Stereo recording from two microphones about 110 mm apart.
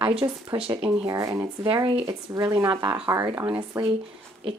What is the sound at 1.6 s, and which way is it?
Speech, 55° right (ahead or behind).